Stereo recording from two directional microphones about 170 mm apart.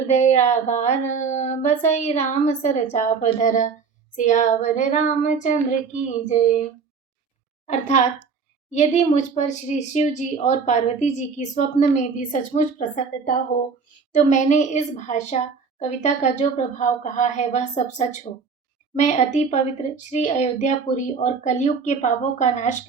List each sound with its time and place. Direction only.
0.1 s a woman's voice: 40° left (ahead or behind)
7.7 s a woman's voice: 45° left (ahead or behind)
14.1 s a woman's voice: 45° left (ahead or behind)